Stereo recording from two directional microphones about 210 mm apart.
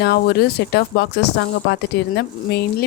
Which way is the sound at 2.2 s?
50° left (ahead or behind).